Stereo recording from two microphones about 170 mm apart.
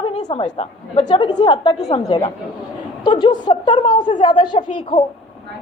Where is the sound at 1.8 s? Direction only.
40° left (ahead or behind).